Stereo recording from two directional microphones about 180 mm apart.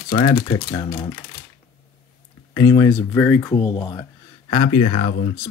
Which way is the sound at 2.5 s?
20° left (ahead or behind).